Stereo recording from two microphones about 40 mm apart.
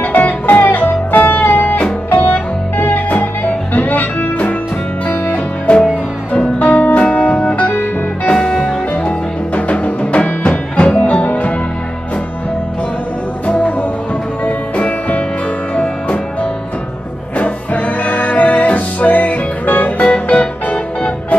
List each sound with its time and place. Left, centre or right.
0.0 s music: left
5.7 s music: left
8.3 s music: left
9.6 s music: left
13.5 s music: left
17.4 s music: left
20.1 s music: left